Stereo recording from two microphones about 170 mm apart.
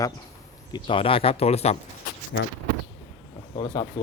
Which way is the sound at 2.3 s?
90° left.